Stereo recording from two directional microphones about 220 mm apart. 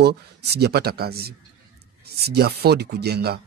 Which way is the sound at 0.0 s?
50° right (ahead or behind).